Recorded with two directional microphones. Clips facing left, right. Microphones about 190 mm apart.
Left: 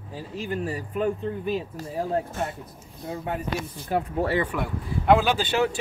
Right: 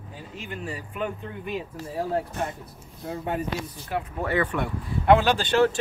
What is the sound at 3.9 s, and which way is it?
Speech, 30° left (ahead or behind).